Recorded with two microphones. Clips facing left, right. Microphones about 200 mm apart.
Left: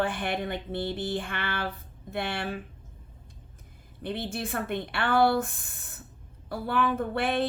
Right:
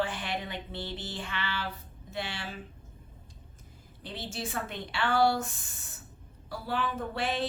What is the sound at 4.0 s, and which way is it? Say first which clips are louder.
A woman's voice: left 6 dB; 55° left (ahead or behind).